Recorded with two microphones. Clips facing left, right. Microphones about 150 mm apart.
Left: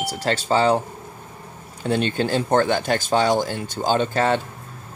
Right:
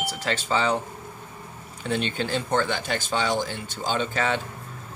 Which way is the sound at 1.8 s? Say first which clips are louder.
Left 5 dB; 40° left (ahead or behind).